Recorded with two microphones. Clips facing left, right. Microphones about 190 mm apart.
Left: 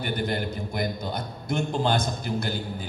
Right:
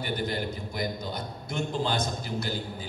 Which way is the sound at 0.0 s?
55° left (ahead or behind).